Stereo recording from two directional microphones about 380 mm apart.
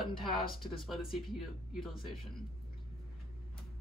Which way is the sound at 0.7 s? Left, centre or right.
Centre.